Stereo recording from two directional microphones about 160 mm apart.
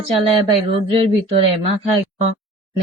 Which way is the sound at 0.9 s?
40° right (ahead or behind).